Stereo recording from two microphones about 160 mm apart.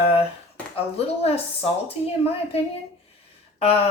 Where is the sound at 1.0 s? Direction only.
40° left (ahead or behind).